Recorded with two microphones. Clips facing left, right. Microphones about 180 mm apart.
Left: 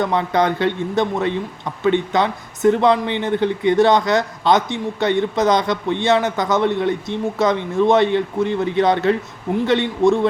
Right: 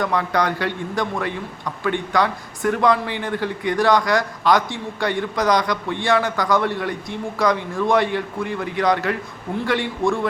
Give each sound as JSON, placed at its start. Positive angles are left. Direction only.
{"t": 0.0, "sound": "a man's voice", "side_deg": 25}